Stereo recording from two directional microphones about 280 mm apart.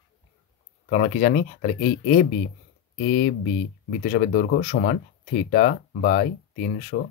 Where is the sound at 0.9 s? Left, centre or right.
Left.